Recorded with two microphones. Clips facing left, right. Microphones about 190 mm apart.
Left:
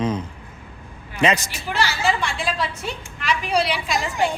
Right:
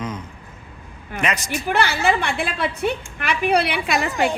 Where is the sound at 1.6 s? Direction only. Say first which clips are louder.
Right 3 dB; 55° right (ahead or behind).